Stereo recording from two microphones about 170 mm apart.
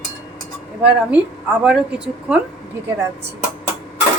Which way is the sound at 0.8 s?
5° right (ahead or behind).